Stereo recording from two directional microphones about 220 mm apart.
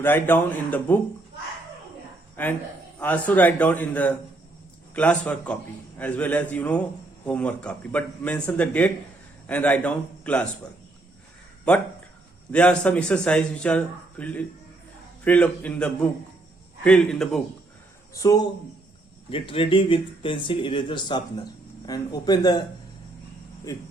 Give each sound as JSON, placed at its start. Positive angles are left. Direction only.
{"t": 0.0, "sound": "speech", "side_deg": 10}
{"t": 2.3, "sound": "a man's voice", "side_deg": 10}
{"t": 11.7, "sound": "a man's voice", "side_deg": 5}
{"t": 18.1, "sound": "speech", "side_deg": 15}